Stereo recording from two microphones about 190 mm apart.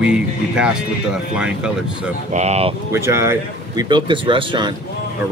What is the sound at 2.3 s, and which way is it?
Speech, 35° right (ahead or behind).